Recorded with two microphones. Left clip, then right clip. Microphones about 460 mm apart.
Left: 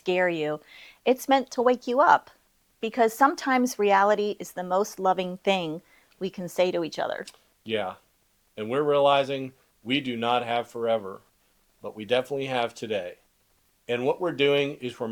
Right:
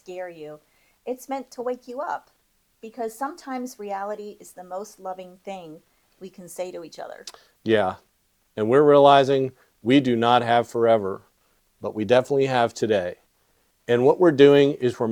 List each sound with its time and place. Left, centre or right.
0.0 s speech: left
7.3 s speech: right